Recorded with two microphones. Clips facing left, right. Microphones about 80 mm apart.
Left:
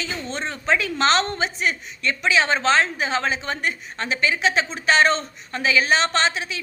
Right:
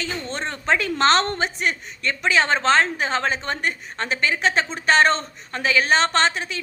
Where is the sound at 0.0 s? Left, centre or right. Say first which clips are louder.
Right 1 dB; right.